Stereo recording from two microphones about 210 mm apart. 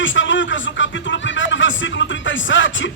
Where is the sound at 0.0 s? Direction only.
65° left (ahead or behind).